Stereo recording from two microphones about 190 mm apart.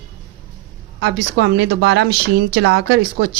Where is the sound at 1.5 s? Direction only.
60° right (ahead or behind).